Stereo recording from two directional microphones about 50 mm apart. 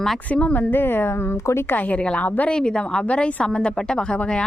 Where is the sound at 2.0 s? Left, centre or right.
Left.